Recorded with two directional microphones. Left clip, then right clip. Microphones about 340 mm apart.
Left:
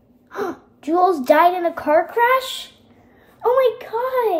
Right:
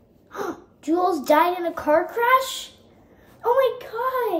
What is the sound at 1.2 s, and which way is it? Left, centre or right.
A woman's voice, centre.